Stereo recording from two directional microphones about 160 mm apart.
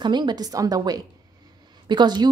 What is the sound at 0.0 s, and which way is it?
A woman's voice, 30° right (ahead or behind).